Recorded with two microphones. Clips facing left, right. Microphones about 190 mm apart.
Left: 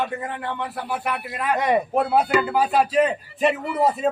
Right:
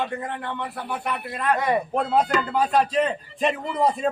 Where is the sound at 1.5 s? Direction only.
20° left (ahead or behind).